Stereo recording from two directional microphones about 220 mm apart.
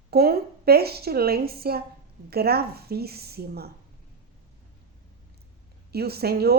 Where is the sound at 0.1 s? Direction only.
45° right (ahead or behind).